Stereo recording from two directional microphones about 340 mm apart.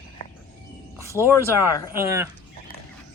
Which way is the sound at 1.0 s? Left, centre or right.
Centre.